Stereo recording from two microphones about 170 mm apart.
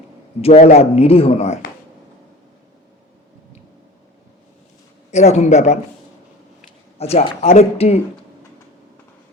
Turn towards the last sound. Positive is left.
turn(degrees=40)  # may be behind; listen again after turning